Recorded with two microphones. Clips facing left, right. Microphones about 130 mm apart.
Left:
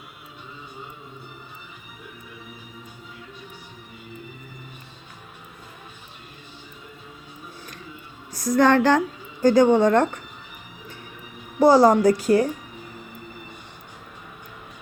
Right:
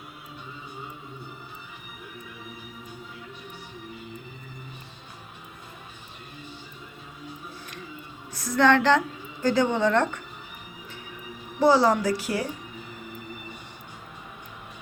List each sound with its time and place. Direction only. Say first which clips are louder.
8.3 s a woman's voice: left 3 dB; 40° left (ahead or behind)
11.6 s a woman's voice: left 5 dB; 45° left (ahead or behind)